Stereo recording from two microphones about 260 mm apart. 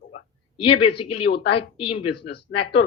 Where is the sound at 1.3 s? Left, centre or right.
Left.